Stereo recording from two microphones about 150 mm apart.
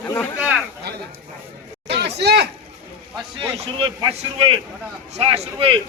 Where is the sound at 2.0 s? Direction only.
90° right.